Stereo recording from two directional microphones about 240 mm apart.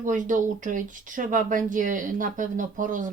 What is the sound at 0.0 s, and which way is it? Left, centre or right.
Speech, right.